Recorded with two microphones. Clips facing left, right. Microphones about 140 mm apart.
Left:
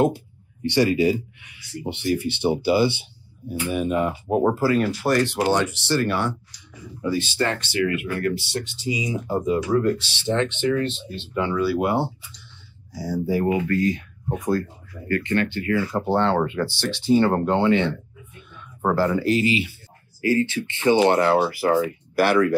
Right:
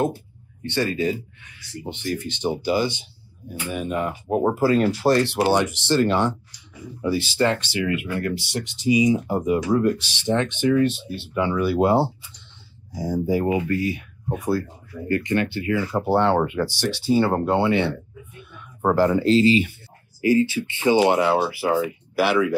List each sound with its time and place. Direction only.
0.0 s speech: 15° left (ahead or behind)
4.4 s speech: 15° right (ahead or behind)
12.9 s speech: 15° right (ahead or behind)
20.2 s speech: 15° right (ahead or behind)